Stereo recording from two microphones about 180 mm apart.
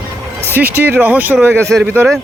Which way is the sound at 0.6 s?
10° right (ahead or behind).